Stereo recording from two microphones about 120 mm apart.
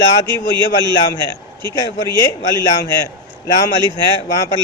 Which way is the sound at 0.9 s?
35° left (ahead or behind).